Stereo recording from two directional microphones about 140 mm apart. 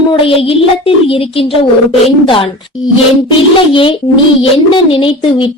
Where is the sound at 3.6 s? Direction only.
40° left (ahead or behind).